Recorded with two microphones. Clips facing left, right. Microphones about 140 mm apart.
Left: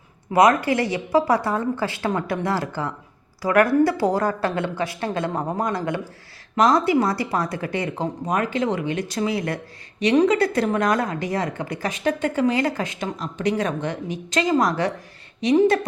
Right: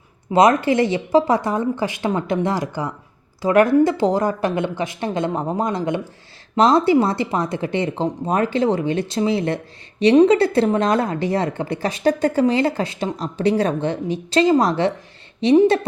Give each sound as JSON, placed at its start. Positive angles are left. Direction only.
{"t": 0.3, "sound": "a woman's voice", "side_deg": -25}